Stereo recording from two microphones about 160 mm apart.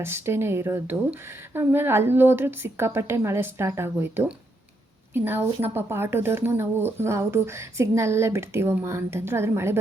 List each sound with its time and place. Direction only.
0.0 s speech: 15° right (ahead or behind)